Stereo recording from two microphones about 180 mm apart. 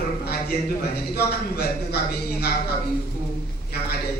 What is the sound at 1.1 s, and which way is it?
Speech, 60° left (ahead or behind).